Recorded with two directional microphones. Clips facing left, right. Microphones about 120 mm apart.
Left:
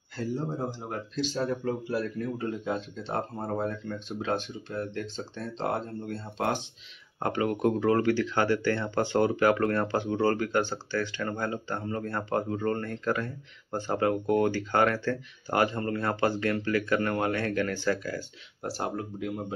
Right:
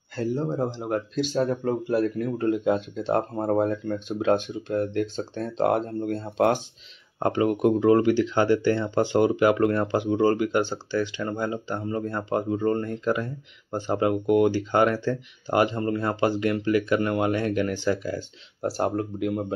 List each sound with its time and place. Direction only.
0.2 s speech: 65° right (ahead or behind)
7.2 s speech: 25° right (ahead or behind)
18.6 s speech: 45° right (ahead or behind); by 19.4 s 60° right (ahead or behind)